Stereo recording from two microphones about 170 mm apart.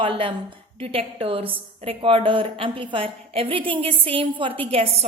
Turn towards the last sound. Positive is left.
turn(degrees=-35)  # may be behind; listen again after turning